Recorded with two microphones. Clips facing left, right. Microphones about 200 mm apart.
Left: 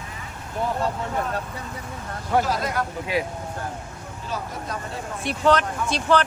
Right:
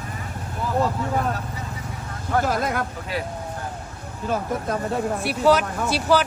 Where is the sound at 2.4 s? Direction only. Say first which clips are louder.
Right 2 dB; 55° right (ahead or behind).